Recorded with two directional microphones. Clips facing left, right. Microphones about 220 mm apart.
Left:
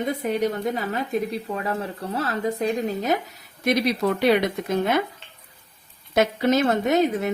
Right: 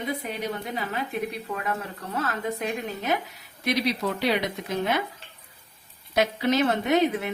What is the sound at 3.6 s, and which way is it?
A woman's voice, 50° left (ahead or behind).